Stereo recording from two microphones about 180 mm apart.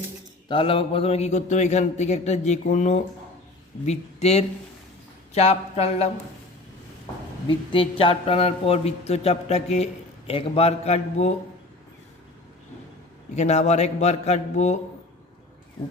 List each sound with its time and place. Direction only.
0.4 s a man's voice: 30° left (ahead or behind)
7.4 s a man's voice: 30° left (ahead or behind)
13.3 s a man's voice: 40° left (ahead or behind)